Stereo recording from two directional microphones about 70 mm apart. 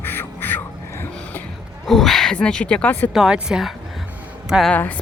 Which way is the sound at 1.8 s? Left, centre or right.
Centre.